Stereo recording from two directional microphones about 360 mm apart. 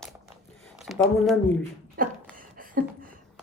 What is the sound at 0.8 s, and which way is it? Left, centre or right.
Speech, centre.